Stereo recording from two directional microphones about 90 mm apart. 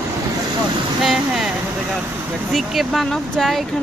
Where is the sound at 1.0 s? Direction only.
5° right (ahead or behind).